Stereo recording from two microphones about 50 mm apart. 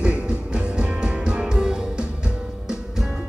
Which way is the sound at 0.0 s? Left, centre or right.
Right.